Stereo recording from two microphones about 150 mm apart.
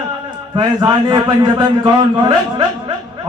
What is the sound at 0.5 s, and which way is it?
A man's voice, 30° right (ahead or behind).